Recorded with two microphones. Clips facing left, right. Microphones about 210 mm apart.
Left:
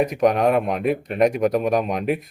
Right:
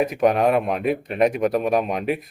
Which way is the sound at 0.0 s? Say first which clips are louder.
Even; centre (ahead or behind).